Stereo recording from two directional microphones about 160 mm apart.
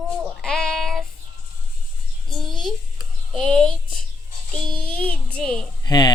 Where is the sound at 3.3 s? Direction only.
Centre (ahead or behind).